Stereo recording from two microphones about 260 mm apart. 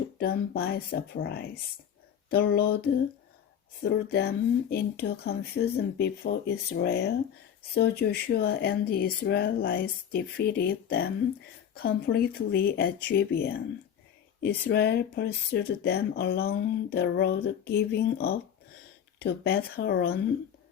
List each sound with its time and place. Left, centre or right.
0.2 s speech: left
3.8 s speech: left